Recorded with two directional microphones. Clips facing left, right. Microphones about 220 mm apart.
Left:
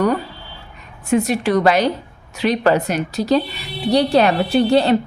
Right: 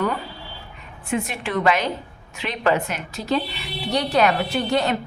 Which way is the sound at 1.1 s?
40° left (ahead or behind).